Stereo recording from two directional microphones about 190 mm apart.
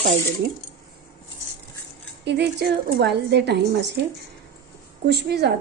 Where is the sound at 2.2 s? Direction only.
60° right (ahead or behind).